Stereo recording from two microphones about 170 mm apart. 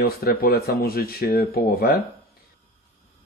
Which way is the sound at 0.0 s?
65° left (ahead or behind).